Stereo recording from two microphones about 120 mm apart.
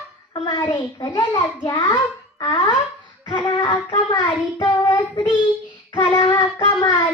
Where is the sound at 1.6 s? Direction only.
30° left (ahead or behind).